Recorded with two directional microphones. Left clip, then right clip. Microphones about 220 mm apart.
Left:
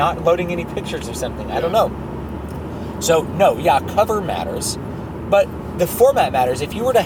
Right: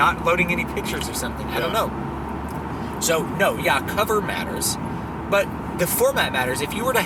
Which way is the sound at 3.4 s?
15° left (ahead or behind).